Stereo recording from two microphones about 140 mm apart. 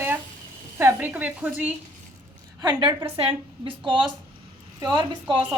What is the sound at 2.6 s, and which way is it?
A woman's voice, 30° right (ahead or behind).